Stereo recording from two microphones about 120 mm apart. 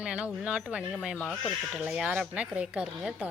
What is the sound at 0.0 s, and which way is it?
A woman's voice, 10° right (ahead or behind).